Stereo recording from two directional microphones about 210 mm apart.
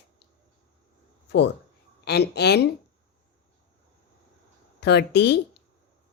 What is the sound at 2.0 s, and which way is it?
Speech, 50° left (ahead or behind).